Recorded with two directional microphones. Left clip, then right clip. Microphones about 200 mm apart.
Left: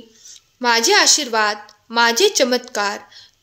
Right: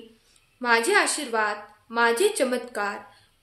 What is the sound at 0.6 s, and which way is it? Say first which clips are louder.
A woman's voice: left 6 dB; 40° left (ahead or behind).